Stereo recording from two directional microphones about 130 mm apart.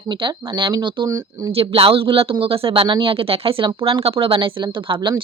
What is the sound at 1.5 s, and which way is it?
Speech, 45° right (ahead or behind).